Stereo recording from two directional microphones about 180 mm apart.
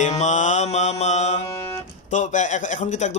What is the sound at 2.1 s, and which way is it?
A man's voice, 45° left (ahead or behind).